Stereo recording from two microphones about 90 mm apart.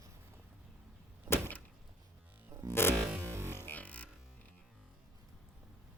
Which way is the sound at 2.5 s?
35° right (ahead or behind).